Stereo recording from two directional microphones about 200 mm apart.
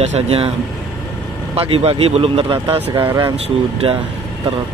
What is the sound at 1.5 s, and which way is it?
Speech, 25° right (ahead or behind).